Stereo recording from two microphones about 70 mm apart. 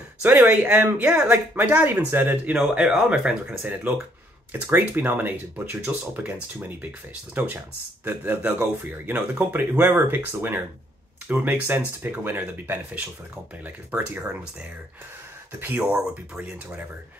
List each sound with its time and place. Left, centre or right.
0.5 s speech: right
2.5 s speech: centre
7.3 s speech: right
15.6 s speech: right